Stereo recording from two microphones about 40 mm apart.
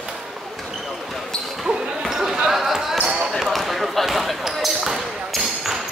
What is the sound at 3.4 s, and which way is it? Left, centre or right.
Basketball bounce, centre.